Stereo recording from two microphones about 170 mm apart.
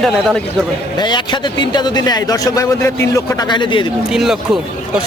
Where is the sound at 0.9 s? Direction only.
25° left (ahead or behind).